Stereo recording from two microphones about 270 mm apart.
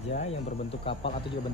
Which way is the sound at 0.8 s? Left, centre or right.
Left.